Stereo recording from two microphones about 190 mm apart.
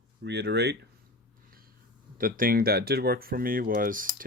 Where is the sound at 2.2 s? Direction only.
50° right (ahead or behind).